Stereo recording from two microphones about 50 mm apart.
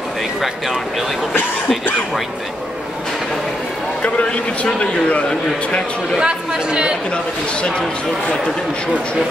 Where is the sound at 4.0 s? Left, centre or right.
Left.